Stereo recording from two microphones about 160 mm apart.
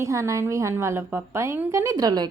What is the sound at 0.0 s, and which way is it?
Speech, 20° right (ahead or behind).